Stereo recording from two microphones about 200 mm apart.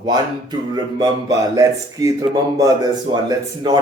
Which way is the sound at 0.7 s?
20° right (ahead or behind).